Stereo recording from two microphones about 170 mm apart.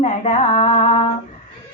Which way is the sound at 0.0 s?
40° left (ahead or behind).